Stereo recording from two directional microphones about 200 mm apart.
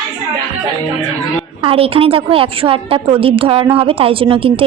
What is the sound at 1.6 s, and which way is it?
A woman's voice, 25° right (ahead or behind).